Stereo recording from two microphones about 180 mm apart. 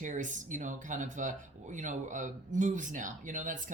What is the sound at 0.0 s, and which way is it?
Speech, 45° right (ahead or behind).